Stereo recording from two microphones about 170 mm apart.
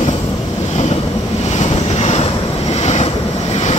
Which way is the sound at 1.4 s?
40° left (ahead or behind).